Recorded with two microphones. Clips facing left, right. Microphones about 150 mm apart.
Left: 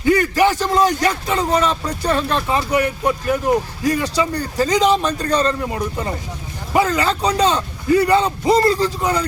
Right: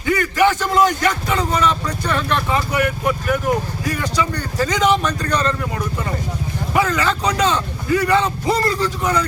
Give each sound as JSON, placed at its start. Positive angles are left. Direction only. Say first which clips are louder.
{"t": 0.0, "sound": "a man's voice", "louder": "left 2 dB", "side_deg": 35}